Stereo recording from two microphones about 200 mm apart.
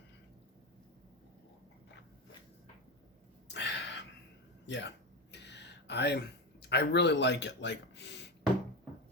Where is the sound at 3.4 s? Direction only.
60° left (ahead or behind).